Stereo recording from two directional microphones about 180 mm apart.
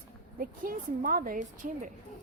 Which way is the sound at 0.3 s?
55° right (ahead or behind).